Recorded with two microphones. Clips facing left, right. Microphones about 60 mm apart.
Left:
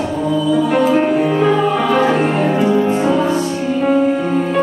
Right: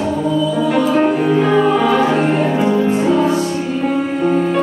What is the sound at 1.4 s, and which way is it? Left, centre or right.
Music, centre.